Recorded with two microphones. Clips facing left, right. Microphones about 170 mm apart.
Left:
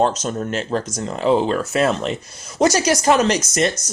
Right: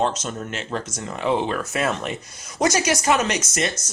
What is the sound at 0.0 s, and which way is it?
Speech, 40° left (ahead or behind).